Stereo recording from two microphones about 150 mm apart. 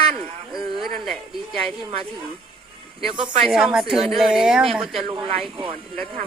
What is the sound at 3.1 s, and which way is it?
Speech, 35° right (ahead or behind).